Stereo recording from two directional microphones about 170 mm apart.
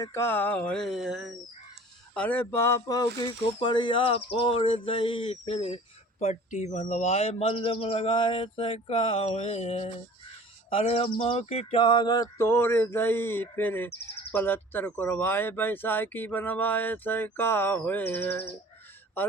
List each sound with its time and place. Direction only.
0.0 s speech: 15° left (ahead or behind); by 1.3 s centre (ahead or behind)
2.1 s speech: 10° left (ahead or behind)
3.2 s bird: 25° left (ahead or behind)
4.9 s speech: 30° left (ahead or behind)
10.7 s bird: 35° left (ahead or behind); by 13.9 s 10° left (ahead or behind)
14.0 s speech: 15° left (ahead or behind)